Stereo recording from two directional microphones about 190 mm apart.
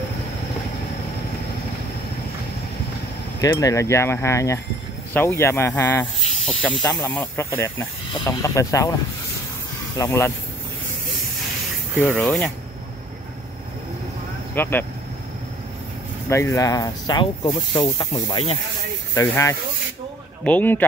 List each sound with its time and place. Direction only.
3.3 s speech: 15° left (ahead or behind)
9.9 s speech: 15° left (ahead or behind)
12.0 s speech: 10° left (ahead or behind)
14.5 s speech: 10° left (ahead or behind)
16.3 s speech: 15° left (ahead or behind)